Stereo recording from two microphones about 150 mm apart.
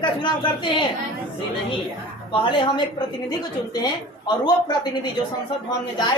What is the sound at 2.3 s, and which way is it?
A woman's voice, 35° left (ahead or behind).